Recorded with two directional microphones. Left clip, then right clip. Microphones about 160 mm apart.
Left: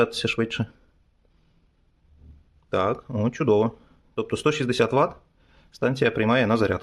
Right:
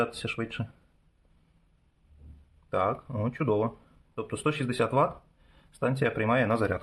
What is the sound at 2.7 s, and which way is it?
Speech, 50° left (ahead or behind).